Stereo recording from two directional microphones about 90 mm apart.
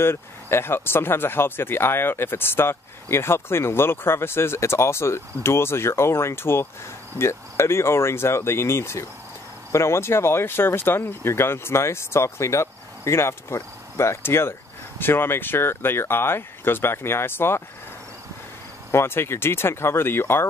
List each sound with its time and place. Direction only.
0.0 s speech: 25° left (ahead or behind)
18.9 s speech: 30° left (ahead or behind)